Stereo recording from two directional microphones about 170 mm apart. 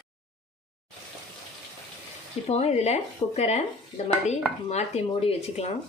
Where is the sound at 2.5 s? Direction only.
40° left (ahead or behind).